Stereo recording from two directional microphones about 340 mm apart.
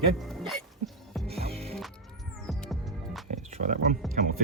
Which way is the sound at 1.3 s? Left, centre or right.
Centre.